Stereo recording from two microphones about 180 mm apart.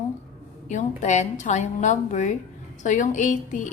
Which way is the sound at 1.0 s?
40° left (ahead or behind).